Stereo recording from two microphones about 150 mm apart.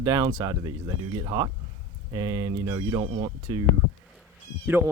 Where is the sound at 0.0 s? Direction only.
25° right (ahead or behind).